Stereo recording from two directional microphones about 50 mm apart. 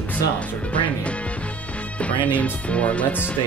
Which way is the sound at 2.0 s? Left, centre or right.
Left.